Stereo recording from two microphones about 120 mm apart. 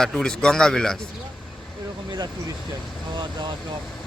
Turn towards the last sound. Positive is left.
turn(degrees=-40)  # may be behind; listen again after turning